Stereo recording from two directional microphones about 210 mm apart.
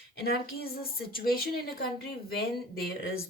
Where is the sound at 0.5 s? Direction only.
45° left (ahead or behind).